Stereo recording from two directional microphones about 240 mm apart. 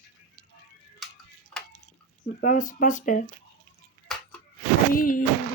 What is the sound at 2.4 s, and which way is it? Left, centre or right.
Speech, left.